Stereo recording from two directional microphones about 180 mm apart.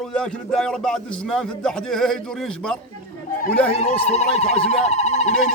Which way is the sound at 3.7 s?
40° left (ahead or behind).